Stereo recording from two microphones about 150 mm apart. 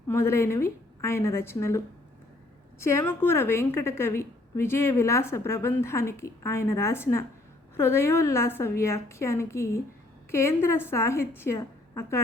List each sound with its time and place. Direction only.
0.1 s a woman's voice: 15° left (ahead or behind)
2.8 s a woman's voice: 15° left (ahead or behind)